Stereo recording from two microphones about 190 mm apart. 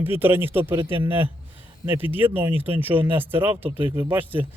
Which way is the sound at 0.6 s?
25° right (ahead or behind).